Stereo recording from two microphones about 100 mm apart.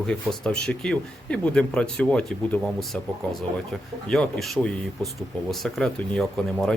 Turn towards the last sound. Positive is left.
turn(degrees=5)  # may be behind; listen again after turning